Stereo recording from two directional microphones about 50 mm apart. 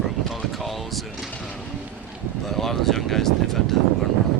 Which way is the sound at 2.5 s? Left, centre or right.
Centre.